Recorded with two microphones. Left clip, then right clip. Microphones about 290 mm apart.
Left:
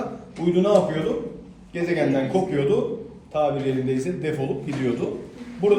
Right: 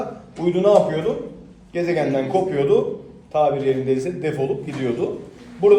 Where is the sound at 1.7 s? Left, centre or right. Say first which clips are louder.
Right 3 dB; centre.